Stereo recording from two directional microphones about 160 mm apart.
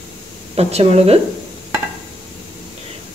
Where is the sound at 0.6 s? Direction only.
40° right (ahead or behind).